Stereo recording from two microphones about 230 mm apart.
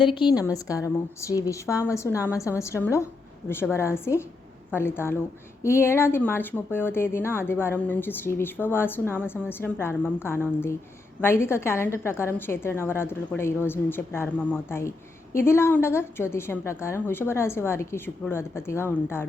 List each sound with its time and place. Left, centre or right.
0.0 s a woman's voice: left